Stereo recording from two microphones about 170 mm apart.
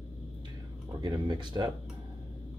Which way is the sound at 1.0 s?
25° right (ahead or behind).